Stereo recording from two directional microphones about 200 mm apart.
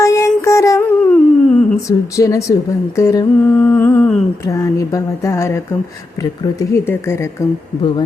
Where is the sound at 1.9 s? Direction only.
15° left (ahead or behind).